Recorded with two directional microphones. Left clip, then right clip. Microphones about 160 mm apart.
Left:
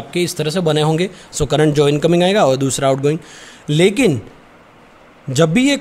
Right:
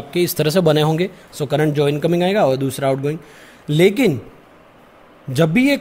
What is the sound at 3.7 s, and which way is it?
Speech, 5° right (ahead or behind).